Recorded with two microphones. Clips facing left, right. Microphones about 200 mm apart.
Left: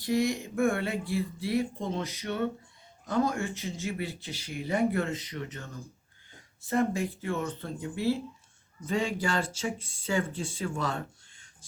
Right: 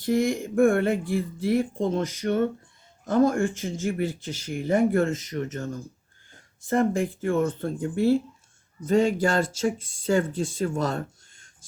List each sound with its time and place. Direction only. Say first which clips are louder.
0.0 s speech: right 4 dB; 50° right (ahead or behind)